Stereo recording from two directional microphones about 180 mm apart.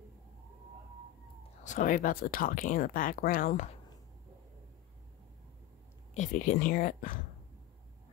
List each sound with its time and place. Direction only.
1.6 s speech: 45° left (ahead or behind)
6.1 s speech: 45° left (ahead or behind)